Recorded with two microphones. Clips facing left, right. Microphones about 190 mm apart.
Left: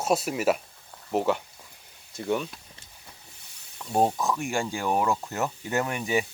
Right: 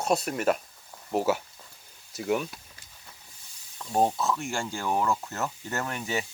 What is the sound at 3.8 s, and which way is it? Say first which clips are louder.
Speech: left 1 dB; 10° left (ahead or behind).